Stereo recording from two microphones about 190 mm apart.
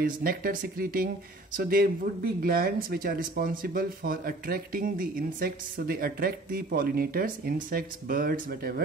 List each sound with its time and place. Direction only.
0.0 s speech: 50° right (ahead or behind)